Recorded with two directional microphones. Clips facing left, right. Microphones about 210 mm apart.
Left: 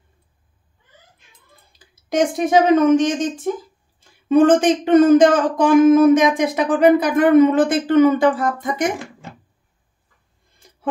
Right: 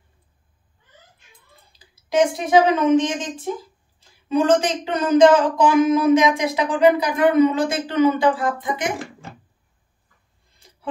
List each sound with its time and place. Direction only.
2.0 s speech: 50° left (ahead or behind)